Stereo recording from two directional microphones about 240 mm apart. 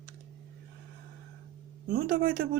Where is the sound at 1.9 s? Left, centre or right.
Right.